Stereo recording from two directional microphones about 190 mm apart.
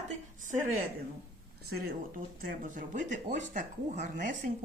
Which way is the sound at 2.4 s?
45° right (ahead or behind).